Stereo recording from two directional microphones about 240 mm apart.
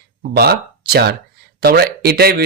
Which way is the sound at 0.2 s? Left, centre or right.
Right.